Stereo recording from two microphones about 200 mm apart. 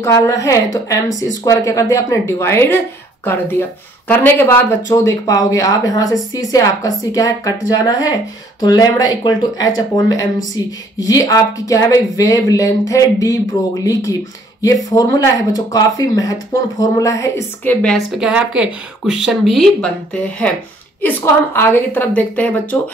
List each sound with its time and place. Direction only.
0.0 s a woman's voice: 15° left (ahead or behind)